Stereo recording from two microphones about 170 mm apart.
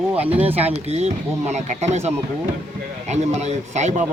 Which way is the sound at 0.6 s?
40° right (ahead or behind).